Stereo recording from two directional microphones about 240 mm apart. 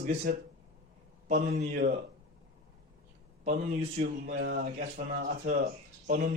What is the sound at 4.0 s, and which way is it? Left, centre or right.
Speech, right.